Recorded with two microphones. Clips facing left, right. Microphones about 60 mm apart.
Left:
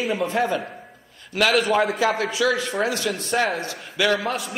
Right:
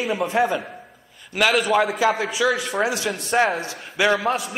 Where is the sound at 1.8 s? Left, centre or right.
Centre.